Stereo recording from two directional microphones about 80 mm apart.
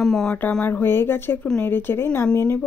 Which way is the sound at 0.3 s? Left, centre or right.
Centre.